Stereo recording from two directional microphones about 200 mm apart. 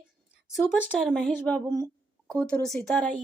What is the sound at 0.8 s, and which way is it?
Speech, centre (ahead or behind).